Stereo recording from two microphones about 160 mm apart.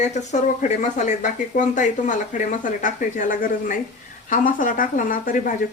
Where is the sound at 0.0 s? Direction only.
45° left (ahead or behind).